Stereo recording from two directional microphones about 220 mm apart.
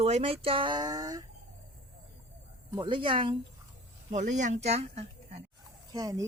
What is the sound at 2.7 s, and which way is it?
Speech, 20° right (ahead or behind).